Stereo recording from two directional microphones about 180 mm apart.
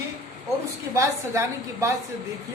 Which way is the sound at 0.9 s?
15° right (ahead or behind).